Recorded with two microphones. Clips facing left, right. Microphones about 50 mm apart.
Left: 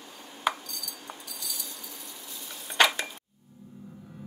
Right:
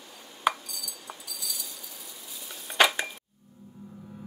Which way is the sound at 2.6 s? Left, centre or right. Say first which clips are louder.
Right 1 dB; centre.